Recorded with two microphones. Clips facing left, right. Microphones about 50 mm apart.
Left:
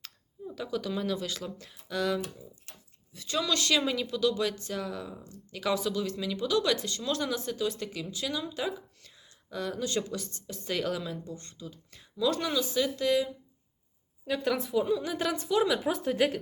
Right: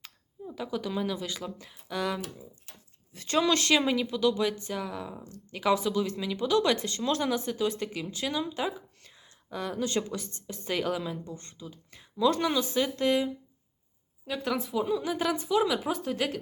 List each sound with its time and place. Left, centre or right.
0.0 s speech: centre
3.1 s speech: right
3.8 s speech: centre
6.5 s speech: right
7.3 s speech: centre
7.5 s speech: right
8.2 s speech: centre
10.7 s speech: centre
11.3 s speech: right
14.3 s speech: centre